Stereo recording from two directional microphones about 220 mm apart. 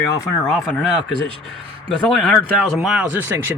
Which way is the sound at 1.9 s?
5° left (ahead or behind).